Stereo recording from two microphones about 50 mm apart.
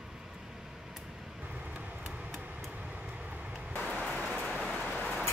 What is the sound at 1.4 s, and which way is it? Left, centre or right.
Vehicle, right.